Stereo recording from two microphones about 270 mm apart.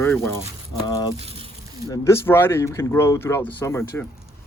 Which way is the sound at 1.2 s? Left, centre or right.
Right.